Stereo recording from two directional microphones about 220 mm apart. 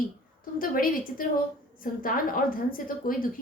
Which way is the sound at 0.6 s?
40° left (ahead or behind).